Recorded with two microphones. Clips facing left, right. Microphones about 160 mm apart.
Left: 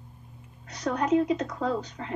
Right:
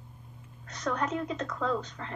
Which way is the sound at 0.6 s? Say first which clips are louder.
Left 4 dB; 15° left (ahead or behind).